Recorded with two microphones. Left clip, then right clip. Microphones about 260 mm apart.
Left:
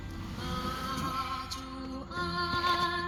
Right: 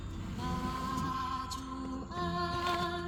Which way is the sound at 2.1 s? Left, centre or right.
Left.